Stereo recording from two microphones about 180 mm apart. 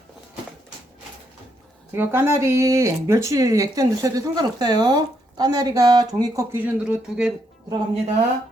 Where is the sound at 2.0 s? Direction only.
15° right (ahead or behind).